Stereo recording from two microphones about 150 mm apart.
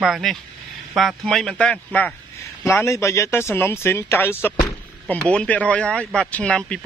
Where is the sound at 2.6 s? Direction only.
20° left (ahead or behind).